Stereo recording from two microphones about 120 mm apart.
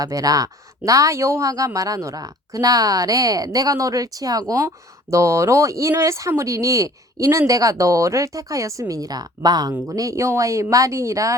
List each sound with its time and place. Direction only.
0.0 s speech: 30° right (ahead or behind)